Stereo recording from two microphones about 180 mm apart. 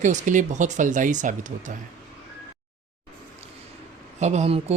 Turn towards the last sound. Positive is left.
turn(degrees=-35)  # may be behind; listen again after turning